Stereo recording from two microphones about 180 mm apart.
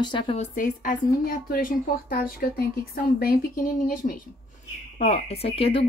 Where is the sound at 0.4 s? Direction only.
45° left (ahead or behind).